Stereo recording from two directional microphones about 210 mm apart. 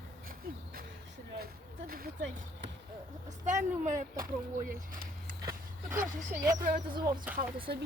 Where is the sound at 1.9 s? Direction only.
45° right (ahead or behind).